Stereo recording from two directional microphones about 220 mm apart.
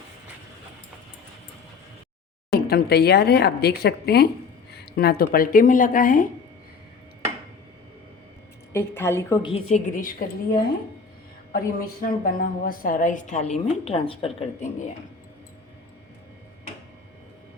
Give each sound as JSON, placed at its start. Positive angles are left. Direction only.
{"t": 2.5, "sound": "a woman's voice", "side_deg": 45}
{"t": 8.7, "sound": "a woman's voice", "side_deg": 10}